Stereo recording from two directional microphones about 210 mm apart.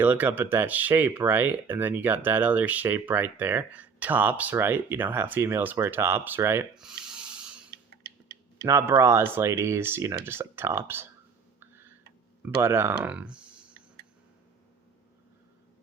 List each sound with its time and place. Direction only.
0.0 s speech: 10° right (ahead or behind)
12.6 s speech: 10° right (ahead or behind)